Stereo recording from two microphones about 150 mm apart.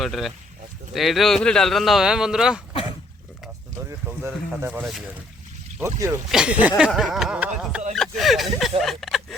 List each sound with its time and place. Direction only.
0.0 s speech: centre (ahead or behind)
3.8 s a sound: 15° right (ahead or behind)
4.6 s speech: 10° right (ahead or behind)
5.8 s speech: 20° right (ahead or behind)
6.3 s speech: 10° right (ahead or behind)
8.8 s a sound: centre (ahead or behind)